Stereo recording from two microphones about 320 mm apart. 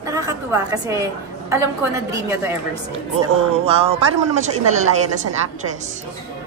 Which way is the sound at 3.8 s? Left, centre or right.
Centre.